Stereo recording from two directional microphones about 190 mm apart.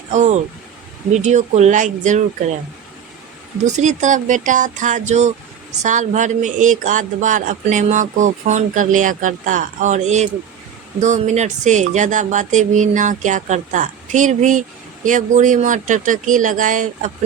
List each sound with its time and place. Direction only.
0.1 s speech: 40° right (ahead or behind)
3.7 s speech: 40° right (ahead or behind)